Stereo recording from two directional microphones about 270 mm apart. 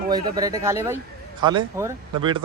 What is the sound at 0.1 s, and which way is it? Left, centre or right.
Speech, centre.